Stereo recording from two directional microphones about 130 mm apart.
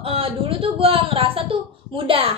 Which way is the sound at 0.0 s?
45° right (ahead or behind).